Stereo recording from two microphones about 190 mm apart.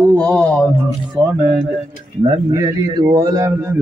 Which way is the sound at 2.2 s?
20° right (ahead or behind).